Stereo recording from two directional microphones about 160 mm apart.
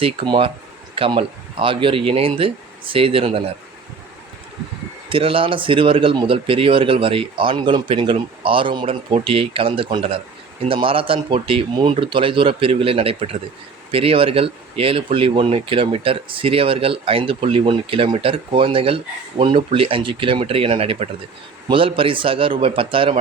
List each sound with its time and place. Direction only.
0.0 s speech: 35° right (ahead or behind)
5.0 s speech: 35° right (ahead or behind)